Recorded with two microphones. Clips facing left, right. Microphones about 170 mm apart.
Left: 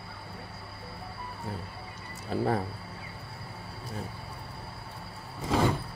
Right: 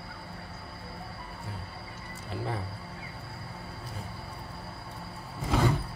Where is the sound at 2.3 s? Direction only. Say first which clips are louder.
Left 7 dB; 40° left (ahead or behind).